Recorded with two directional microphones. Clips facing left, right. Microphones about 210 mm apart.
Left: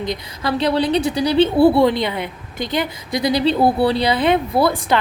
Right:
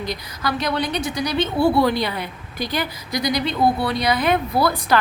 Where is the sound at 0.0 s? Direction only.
25° left (ahead or behind).